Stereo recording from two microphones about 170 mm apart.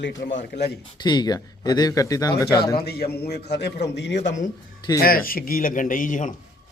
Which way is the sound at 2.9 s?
65° left (ahead or behind).